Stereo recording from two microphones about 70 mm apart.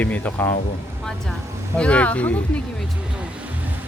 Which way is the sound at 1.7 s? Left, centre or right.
Centre.